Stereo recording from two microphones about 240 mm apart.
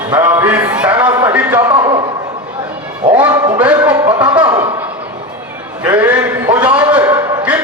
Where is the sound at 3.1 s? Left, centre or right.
Centre.